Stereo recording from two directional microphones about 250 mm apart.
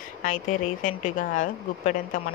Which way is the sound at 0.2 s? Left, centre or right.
Left.